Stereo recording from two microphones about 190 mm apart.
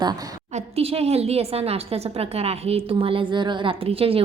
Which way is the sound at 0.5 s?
30° right (ahead or behind).